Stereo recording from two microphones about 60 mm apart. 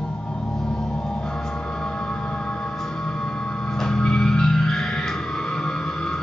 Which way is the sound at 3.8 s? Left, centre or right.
Centre.